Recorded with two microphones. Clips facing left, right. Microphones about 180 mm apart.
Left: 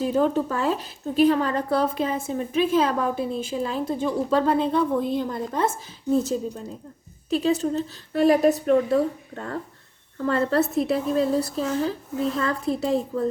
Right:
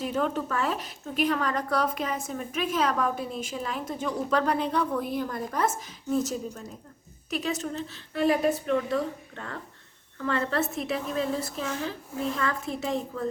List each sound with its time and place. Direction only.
0.0 s a woman's voice: 35° left (ahead or behind)